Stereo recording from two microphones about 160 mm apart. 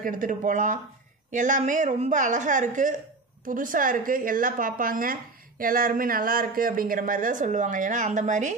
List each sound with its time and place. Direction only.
0.0 s a woman's voice: 55° right (ahead or behind)